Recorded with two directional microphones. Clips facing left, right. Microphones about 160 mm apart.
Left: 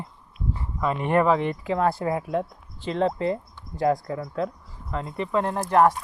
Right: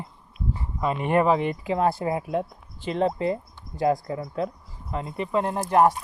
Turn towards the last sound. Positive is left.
turn(degrees=-20)  # may be behind; listen again after turning